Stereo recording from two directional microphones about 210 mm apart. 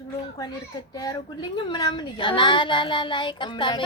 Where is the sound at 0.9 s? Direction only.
20° left (ahead or behind).